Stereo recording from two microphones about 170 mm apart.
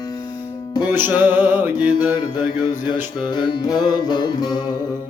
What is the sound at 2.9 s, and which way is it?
Music, 25° left (ahead or behind).